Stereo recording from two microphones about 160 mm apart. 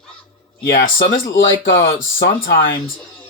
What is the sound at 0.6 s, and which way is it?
Speech, 65° left (ahead or behind).